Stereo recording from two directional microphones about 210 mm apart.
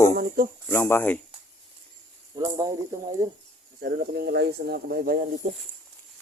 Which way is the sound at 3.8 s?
50° right (ahead or behind).